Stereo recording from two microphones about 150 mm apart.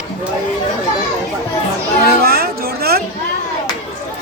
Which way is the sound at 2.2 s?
90° right.